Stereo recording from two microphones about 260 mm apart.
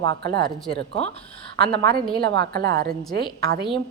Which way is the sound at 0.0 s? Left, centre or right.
Right.